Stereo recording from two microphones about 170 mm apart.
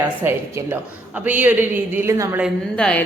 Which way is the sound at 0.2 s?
10° right (ahead or behind).